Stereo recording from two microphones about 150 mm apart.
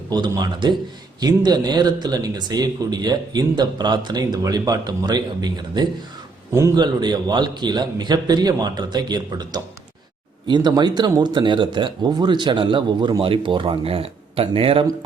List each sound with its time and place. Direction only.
0.1 s speech: 25° right (ahead or behind)